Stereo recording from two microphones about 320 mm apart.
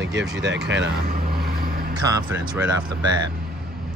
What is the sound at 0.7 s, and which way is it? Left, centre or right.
Vehicle, right.